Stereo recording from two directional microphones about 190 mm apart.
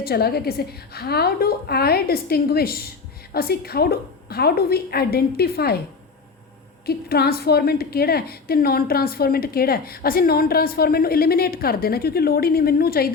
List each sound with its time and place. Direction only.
0.0 s a woman's voice: 55° left (ahead or behind)
6.8 s a woman's voice: 55° left (ahead or behind)